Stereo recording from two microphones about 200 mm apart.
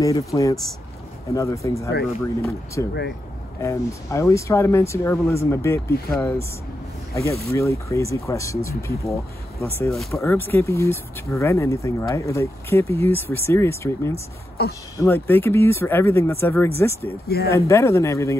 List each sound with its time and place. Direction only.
0.0 s speech: 15° left (ahead or behind)
7.5 s speech: 15° left (ahead or behind)
9.8 s speech: centre (ahead or behind)
14.6 s speech: 50° left (ahead or behind)
15.0 s speech: 10° left (ahead or behind)